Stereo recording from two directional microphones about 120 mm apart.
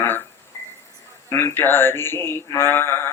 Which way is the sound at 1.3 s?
20° left (ahead or behind).